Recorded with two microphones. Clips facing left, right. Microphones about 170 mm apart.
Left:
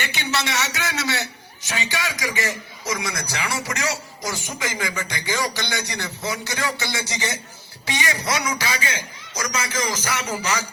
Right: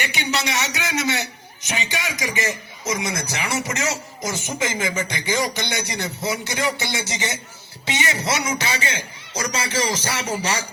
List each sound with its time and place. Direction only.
0.0 s a man's voice: 15° right (ahead or behind)